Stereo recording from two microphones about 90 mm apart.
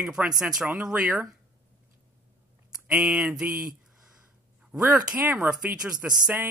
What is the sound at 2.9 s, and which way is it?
Speech, 15° right (ahead or behind).